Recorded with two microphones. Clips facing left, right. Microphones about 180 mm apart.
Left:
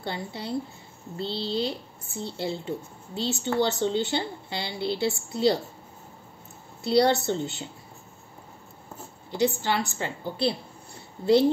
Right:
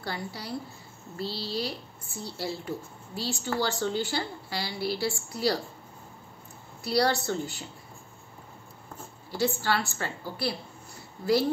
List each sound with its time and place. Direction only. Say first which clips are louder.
0.0 s a woman's voice: left 3 dB; 25° left (ahead or behind)
6.8 s a woman's voice: left 5 dB; 25° left (ahead or behind)
9.3 s a woman's voice: left 2 dB; 20° left (ahead or behind)